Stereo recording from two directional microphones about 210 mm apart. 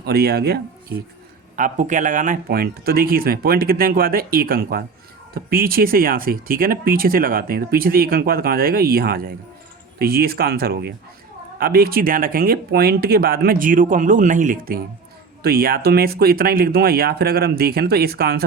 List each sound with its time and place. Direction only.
0.0 s speech: 50° right (ahead or behind)
1.5 s speech: 35° right (ahead or behind)